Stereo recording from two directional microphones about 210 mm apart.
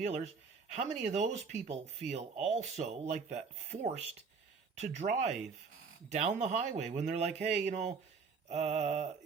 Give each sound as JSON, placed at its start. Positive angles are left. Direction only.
{"t": 0.0, "sound": "speech", "side_deg": -30}